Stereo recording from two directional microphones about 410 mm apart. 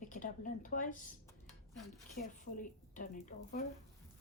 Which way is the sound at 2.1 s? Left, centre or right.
Centre.